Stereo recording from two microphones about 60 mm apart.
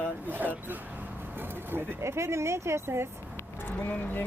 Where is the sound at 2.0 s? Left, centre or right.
Right.